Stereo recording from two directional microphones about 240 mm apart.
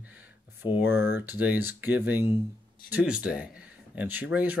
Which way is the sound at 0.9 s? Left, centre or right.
Left.